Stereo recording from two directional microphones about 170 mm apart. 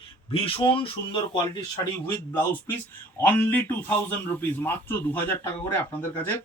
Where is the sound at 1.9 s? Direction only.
15° left (ahead or behind).